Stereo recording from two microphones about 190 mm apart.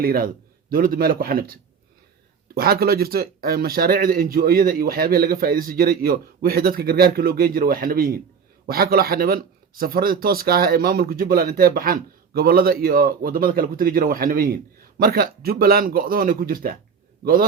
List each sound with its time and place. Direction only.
0.0 s speech: 50° right (ahead or behind)
2.6 s speech: 55° right (ahead or behind)